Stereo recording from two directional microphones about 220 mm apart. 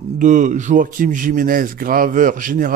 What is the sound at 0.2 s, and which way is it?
A man's voice, 35° right (ahead or behind).